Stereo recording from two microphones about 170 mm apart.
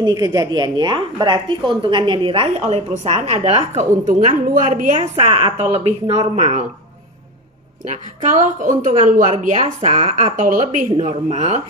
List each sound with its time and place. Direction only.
0.0 s a woman's voice: 20° right (ahead or behind); by 6.6 s 45° right (ahead or behind)
7.8 s a woman's voice: 45° right (ahead or behind)